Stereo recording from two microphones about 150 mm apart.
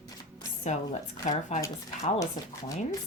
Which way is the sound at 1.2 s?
55° left (ahead or behind).